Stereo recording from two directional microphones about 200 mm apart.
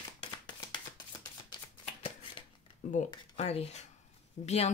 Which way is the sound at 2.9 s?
35° left (ahead or behind).